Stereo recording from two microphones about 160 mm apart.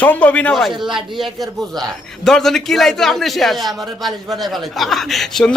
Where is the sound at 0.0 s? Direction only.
10° left (ahead or behind).